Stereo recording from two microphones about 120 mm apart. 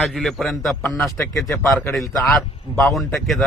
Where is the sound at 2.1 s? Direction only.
Centre (ahead or behind).